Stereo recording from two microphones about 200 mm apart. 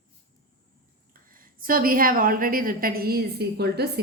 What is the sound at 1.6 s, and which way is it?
A woman's voice, 45° right (ahead or behind).